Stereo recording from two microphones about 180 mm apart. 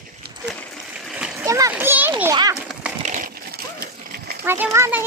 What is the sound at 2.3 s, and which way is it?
Children playing, 20° right (ahead or behind).